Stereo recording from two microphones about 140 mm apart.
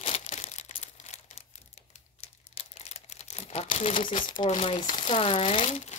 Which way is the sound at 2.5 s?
50° left (ahead or behind).